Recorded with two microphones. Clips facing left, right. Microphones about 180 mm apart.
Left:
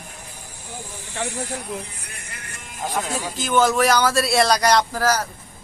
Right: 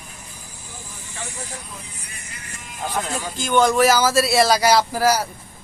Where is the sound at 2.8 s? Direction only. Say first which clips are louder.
Even; 5° left (ahead or behind).